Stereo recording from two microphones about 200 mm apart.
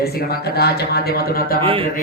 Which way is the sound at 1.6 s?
25° right (ahead or behind).